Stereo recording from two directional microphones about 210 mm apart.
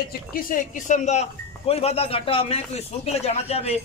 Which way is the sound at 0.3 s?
40° left (ahead or behind).